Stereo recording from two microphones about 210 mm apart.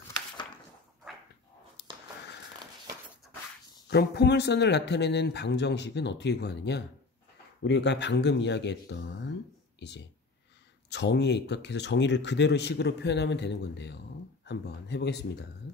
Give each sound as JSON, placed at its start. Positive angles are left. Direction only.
{"t": 3.9, "sound": "speech", "side_deg": 55}